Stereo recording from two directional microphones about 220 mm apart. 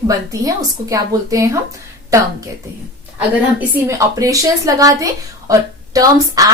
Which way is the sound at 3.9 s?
15° right (ahead or behind).